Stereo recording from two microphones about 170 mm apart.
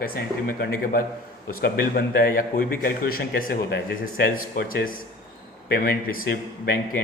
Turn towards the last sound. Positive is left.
turn(degrees=65)  # may be behind; listen again after turning